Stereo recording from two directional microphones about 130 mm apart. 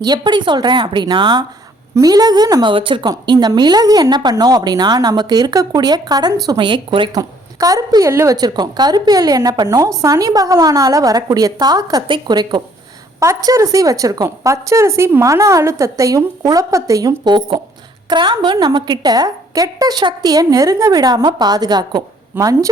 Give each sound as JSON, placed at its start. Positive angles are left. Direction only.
{"t": 0.0, "sound": "a woman's voice", "side_deg": -35}
{"t": 7.1, "sound": "a woman's voice", "side_deg": -25}